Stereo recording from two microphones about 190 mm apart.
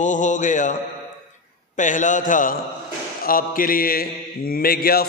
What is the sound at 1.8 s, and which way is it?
Mantra, 40° left (ahead or behind).